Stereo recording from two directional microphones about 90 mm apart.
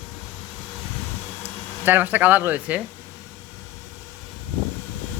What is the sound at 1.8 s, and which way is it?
Speech, 20° right (ahead or behind).